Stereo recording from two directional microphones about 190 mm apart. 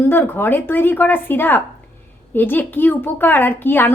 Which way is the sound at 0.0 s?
10° left (ahead or behind).